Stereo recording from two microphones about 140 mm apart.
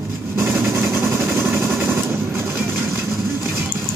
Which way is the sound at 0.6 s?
20° right (ahead or behind).